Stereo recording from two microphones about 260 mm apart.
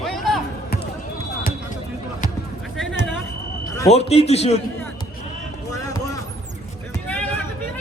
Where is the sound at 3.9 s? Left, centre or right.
Left.